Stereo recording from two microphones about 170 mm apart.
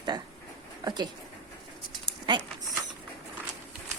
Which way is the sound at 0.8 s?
25° right (ahead or behind).